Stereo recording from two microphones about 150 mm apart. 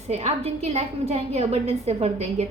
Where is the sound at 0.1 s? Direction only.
45° right (ahead or behind).